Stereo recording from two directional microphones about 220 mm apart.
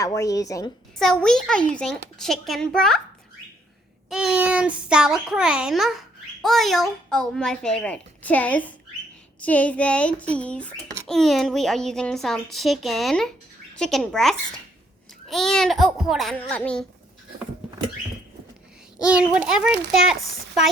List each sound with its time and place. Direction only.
0.0 s a woman's voice: 15° left (ahead or behind)
0.9 s a child's voice: centre (ahead or behind)
4.1 s a child's voice: 5° right (ahead or behind)
18.9 s a child's voice: 5° right (ahead or behind)